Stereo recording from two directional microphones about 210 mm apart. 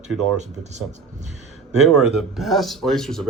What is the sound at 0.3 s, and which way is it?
Speech, 35° right (ahead or behind).